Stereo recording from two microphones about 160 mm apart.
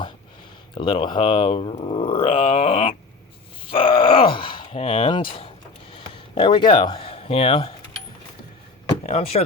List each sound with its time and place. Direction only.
0.7 s speech: 30° left (ahead or behind)
5.9 s a sound: 30° left (ahead or behind)
9.0 s speech: 45° left (ahead or behind)